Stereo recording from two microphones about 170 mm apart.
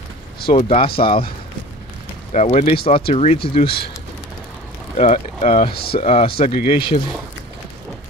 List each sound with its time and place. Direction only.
0.5 s speech: 35° left (ahead or behind)
2.3 s speech: 45° left (ahead or behind)
4.9 s speech: 40° left (ahead or behind)